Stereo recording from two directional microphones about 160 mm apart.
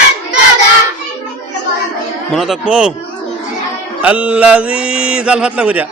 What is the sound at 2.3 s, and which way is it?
Speech, centre (ahead or behind).